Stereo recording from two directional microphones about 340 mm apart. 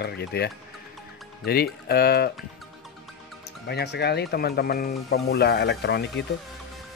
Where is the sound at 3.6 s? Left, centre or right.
Left.